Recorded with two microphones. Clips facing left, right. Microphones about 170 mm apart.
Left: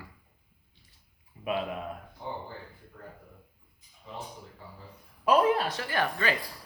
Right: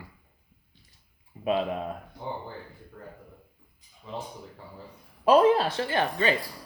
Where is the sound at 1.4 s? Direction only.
30° right (ahead or behind).